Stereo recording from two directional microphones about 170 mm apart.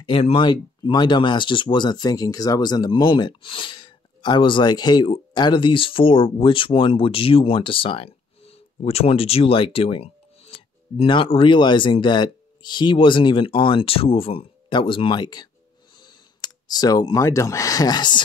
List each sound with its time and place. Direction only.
0.0 s speech: 35° left (ahead or behind)